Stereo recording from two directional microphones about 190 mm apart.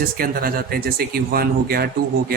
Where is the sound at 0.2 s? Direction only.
50° right (ahead or behind).